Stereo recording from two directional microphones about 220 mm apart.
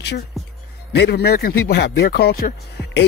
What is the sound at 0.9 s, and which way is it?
Speech, 50° left (ahead or behind).